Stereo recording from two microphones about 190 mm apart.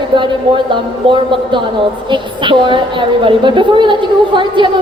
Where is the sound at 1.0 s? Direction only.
25° right (ahead or behind).